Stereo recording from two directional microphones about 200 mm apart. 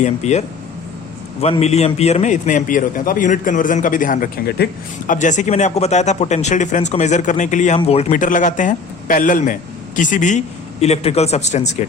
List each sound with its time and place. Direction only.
0.0 s a man's voice: 35° left (ahead or behind)